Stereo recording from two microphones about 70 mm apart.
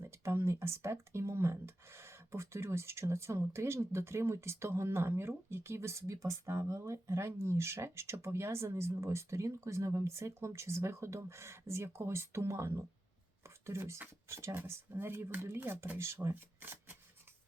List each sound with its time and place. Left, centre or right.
0.0 s speech: right